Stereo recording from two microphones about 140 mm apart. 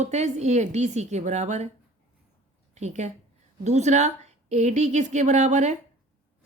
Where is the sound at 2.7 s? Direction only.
55° right (ahead or behind).